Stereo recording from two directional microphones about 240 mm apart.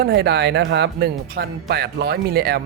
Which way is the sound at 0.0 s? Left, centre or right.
Right.